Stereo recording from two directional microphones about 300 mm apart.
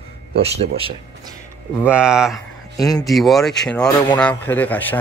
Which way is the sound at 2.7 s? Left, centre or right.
Centre.